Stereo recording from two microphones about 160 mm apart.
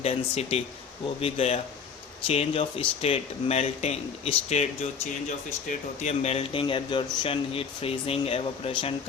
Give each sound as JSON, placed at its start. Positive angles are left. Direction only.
{"t": 0.0, "sound": "speech", "side_deg": 40}
{"t": 6.0, "sound": "speech", "side_deg": 45}